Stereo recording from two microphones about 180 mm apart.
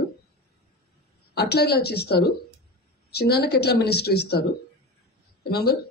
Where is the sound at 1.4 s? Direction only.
65° left (ahead or behind).